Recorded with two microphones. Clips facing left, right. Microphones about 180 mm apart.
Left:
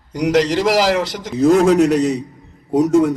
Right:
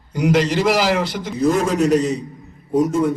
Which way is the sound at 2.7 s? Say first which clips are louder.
Left 4 dB; 90° left.